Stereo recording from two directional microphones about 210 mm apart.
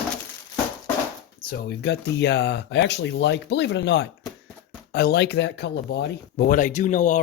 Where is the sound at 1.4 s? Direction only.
45° left (ahead or behind).